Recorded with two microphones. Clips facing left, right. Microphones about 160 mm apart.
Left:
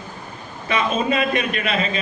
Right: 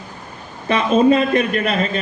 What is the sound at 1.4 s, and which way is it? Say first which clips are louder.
Speech: right 4 dB; 45° right (ahead or behind).